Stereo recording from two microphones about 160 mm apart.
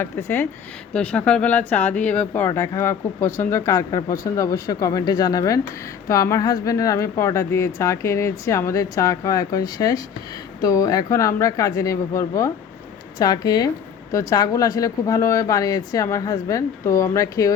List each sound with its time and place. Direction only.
0.0 s speech: 15° left (ahead or behind)